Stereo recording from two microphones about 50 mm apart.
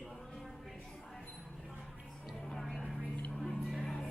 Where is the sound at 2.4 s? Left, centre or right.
Centre.